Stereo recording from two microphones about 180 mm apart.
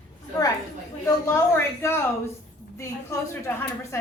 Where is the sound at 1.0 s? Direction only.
15° left (ahead or behind).